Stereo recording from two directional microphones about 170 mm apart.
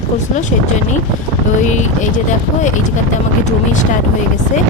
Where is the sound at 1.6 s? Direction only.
45° left (ahead or behind).